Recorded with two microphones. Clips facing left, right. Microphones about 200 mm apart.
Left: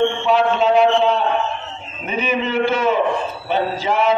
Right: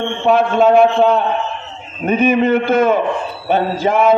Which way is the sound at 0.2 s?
50° right (ahead or behind).